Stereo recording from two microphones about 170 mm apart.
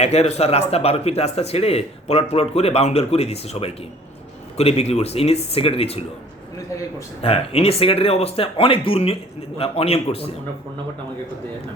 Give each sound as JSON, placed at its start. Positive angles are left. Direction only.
{"t": 0.0, "sound": "a man's voice", "side_deg": 40}
{"t": 7.2, "sound": "a man's voice", "side_deg": 35}